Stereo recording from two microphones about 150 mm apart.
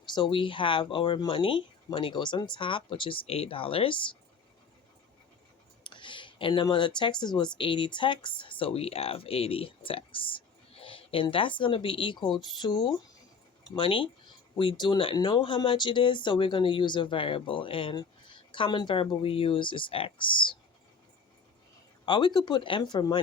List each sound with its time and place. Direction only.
0.1 s speech: 35° left (ahead or behind)
5.8 s speech: 30° left (ahead or behind)
22.0 s speech: 30° left (ahead or behind)